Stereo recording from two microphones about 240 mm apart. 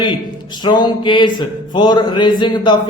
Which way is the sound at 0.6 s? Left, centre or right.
Centre.